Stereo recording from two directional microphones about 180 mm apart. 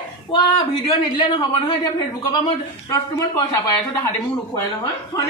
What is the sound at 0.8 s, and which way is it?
Speech, 25° left (ahead or behind).